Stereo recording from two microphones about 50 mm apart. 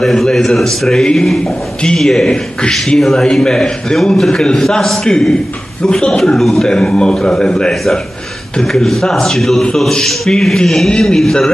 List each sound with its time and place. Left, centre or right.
0.0 s a man's voice: centre
9.0 s a man's voice: centre